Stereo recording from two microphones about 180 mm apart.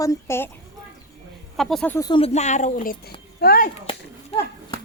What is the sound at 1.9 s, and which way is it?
Speech, 20° left (ahead or behind).